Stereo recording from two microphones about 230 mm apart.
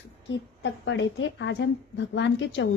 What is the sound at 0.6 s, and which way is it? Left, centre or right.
A woman's voice, left.